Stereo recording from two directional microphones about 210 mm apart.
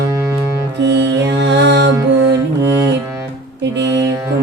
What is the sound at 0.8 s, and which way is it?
Mantra, 55° right (ahead or behind).